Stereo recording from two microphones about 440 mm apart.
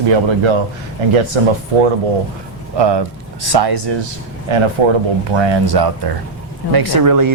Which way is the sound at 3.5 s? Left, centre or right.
Right.